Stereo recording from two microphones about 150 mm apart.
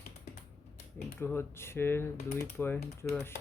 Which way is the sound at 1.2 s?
15° left (ahead or behind).